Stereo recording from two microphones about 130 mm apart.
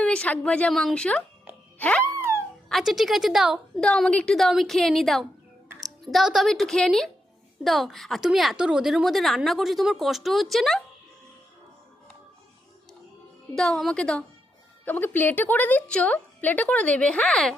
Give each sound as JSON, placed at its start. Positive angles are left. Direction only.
{"t": 0.0, "sound": "a woman's voice", "side_deg": 10}
{"t": 2.0, "sound": "a sound", "side_deg": -20}
{"t": 2.6, "sound": "a woman's voice", "side_deg": 0}
{"t": 13.6, "sound": "a woman's voice", "side_deg": 5}